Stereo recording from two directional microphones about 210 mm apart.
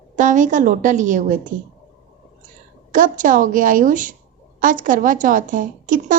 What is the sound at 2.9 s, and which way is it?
A woman's voice, 40° right (ahead or behind).